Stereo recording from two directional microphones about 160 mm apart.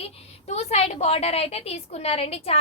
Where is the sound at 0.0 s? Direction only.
40° left (ahead or behind).